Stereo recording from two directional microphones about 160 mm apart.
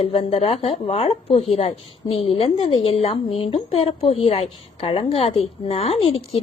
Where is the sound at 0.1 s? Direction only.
35° left (ahead or behind).